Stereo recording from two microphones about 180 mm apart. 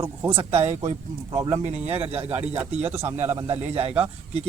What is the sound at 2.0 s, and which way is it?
Speech, 10° right (ahead or behind).